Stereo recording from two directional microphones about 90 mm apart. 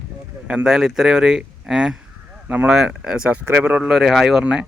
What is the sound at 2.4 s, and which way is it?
Speech, 20° right (ahead or behind).